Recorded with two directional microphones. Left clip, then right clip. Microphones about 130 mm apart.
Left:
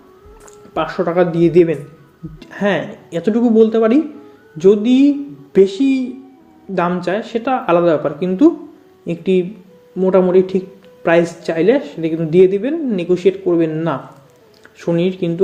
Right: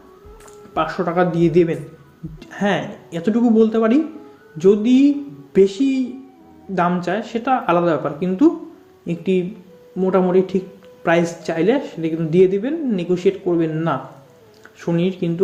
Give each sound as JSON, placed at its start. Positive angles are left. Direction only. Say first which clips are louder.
{"t": 0.7, "sound": "speech", "louder": "left 3 dB", "side_deg": 35}